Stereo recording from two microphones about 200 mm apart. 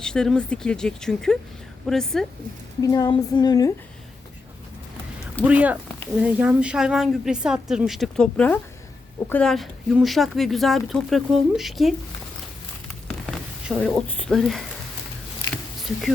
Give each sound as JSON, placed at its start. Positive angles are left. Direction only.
{"t": 0.0, "sound": "speech", "side_deg": 5}
{"t": 2.8, "sound": "speech", "side_deg": 20}
{"t": 5.5, "sound": "speech", "side_deg": -5}
{"t": 13.1, "sound": "a sound", "side_deg": 0}